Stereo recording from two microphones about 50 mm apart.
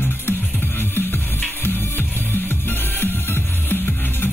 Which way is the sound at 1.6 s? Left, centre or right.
Left.